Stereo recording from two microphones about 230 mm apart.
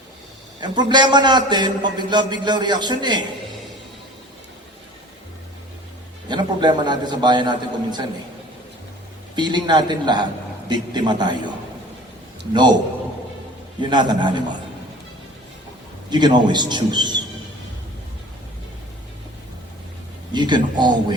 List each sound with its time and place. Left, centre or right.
0.6 s a man's voice: centre
6.2 s a man's voice: centre
9.3 s a man's voice: centre
12.5 s a man's voice: centre
13.8 s a man's voice: centre
16.0 s a man's voice: centre
20.3 s a man's voice: centre